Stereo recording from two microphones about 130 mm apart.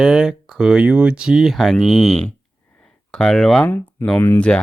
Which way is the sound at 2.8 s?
5° left (ahead or behind).